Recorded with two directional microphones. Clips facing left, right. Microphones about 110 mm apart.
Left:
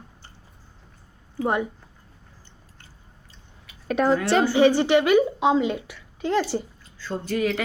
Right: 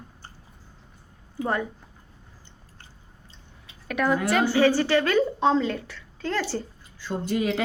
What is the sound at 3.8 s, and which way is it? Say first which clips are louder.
A woman's voice: left 3 dB; 30° left (ahead or behind).